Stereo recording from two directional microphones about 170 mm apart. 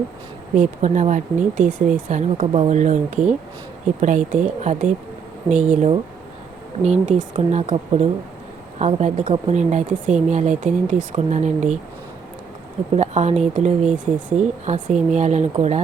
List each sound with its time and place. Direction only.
0.5 s speech: 45° right (ahead or behind)
12.9 s speech: 40° right (ahead or behind)